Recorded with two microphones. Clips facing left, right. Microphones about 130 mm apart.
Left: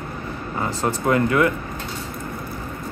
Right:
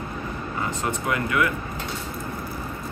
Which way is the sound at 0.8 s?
35° left (ahead or behind).